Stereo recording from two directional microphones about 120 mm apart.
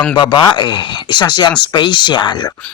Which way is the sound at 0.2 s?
40° left (ahead or behind).